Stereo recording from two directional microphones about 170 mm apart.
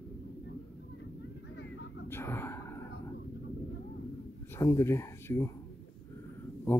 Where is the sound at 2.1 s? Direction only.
15° left (ahead or behind).